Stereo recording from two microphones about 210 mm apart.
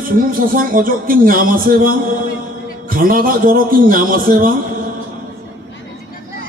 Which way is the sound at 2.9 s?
40° right (ahead or behind).